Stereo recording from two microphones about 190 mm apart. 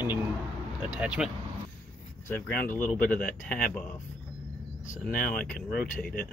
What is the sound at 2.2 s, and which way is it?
Speech, 10° left (ahead or behind).